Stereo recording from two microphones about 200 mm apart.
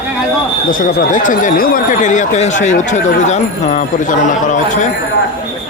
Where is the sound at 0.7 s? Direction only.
45° left (ahead or behind).